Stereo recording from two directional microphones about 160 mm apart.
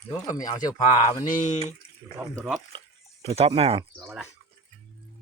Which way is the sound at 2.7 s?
35° right (ahead or behind).